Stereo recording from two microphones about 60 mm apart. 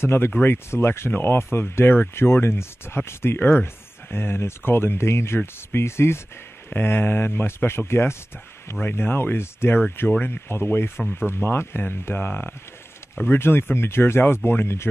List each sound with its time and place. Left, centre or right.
0.0 s speech: left
6.7 s speech: left
8.8 s speech: left